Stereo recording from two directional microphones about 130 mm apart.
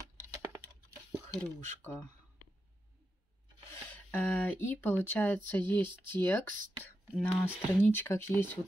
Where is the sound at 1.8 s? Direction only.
20° left (ahead or behind).